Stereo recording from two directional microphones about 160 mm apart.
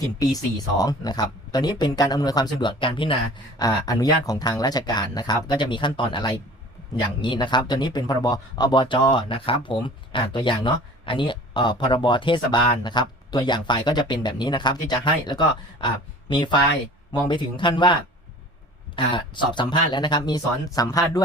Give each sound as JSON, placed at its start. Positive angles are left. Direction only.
{"t": 0.0, "sound": "speech", "side_deg": 20}
{"t": 18.9, "sound": "speech", "side_deg": 30}